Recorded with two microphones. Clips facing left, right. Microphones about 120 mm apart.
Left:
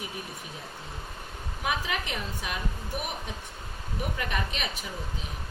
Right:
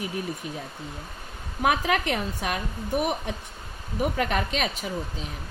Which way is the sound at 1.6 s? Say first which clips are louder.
Right 8 dB; 60° right (ahead or behind).